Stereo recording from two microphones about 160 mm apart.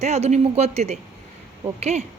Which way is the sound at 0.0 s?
45° right (ahead or behind).